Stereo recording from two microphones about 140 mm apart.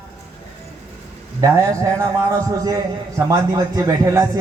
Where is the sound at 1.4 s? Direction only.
25° right (ahead or behind).